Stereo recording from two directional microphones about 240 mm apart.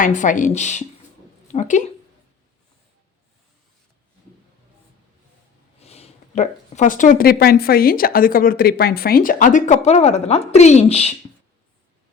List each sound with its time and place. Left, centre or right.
0.0 s speech: left
5.8 s speech: left